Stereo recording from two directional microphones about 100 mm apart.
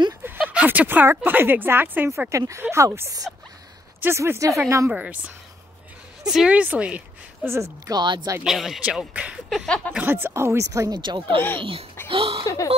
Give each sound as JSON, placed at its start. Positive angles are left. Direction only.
{"t": 0.5, "sound": "speech", "side_deg": -15}
{"t": 4.9, "sound": "speech", "side_deg": -10}
{"t": 7.4, "sound": "speech", "side_deg": -30}
{"t": 8.0, "sound": "speech", "side_deg": -50}
{"t": 8.5, "sound": "speech", "side_deg": -5}
{"t": 11.0, "sound": "speech", "side_deg": -50}
{"t": 12.1, "sound": "a sound", "side_deg": -65}